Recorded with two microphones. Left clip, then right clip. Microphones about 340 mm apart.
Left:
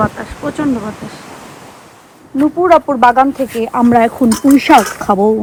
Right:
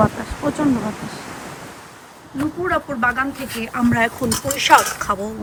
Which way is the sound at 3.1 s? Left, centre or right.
Centre.